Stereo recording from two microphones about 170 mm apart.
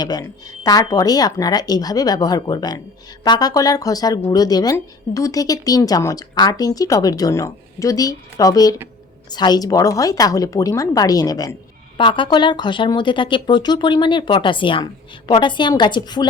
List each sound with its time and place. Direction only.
0.0 s speech: 25° left (ahead or behind)